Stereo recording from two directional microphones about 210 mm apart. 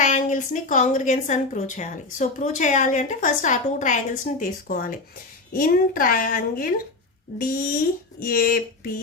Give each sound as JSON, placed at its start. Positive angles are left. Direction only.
{"t": 0.0, "sound": "a woman's voice", "side_deg": 35}